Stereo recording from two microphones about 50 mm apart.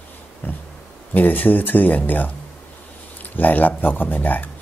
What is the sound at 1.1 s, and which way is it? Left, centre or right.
Speech, left.